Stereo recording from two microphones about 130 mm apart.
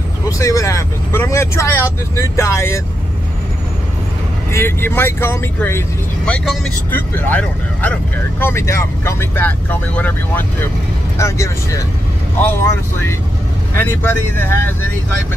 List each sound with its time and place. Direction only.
0.4 s speech: 25° left (ahead or behind)
4.5 s speech: 20° left (ahead or behind)